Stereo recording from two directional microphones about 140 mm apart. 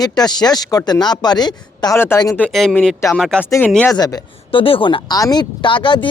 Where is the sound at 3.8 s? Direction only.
25° left (ahead or behind).